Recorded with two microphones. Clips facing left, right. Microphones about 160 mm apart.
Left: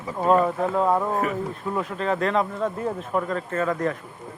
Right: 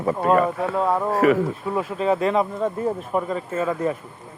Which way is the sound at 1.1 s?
90° right.